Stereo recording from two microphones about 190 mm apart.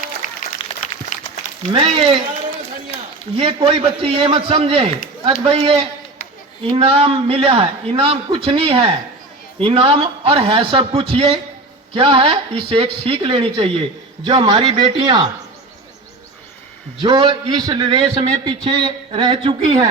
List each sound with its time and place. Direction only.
0.2 s applause: 40° left (ahead or behind)
0.6 s a sound: 25° left (ahead or behind)
1.1 s a sound: 40° left (ahead or behind)
1.7 s a man's voice: 30° right (ahead or behind)
3.3 s a man's voice: 30° right (ahead or behind)
17.0 s a man's voice: 25° right (ahead or behind)